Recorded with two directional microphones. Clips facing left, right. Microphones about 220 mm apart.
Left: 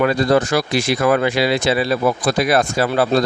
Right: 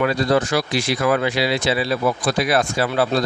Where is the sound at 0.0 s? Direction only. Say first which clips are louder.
Left 3 dB; 50° left (ahead or behind).